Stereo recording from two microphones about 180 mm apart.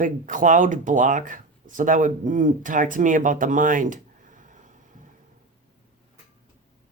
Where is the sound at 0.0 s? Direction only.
45° right (ahead or behind).